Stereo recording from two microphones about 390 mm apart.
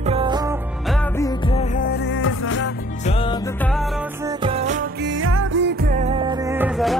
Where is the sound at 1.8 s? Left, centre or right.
Left.